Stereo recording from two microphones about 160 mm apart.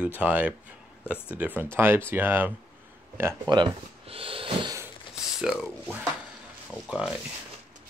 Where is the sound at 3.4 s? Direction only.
30° right (ahead or behind).